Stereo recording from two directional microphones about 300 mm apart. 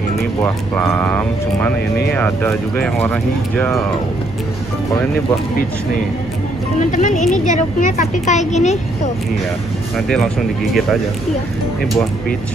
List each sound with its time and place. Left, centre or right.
0.4 s speech: centre
6.8 s a woman's voice: left
9.9 s speech: centre